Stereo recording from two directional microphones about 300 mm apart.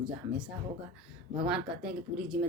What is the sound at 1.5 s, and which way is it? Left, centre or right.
Speech, centre.